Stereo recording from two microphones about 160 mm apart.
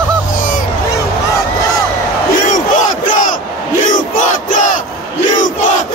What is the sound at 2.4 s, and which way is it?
Battle cry, 50° left (ahead or behind).